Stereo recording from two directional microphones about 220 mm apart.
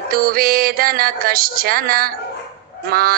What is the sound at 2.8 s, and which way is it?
Honk, 40° right (ahead or behind).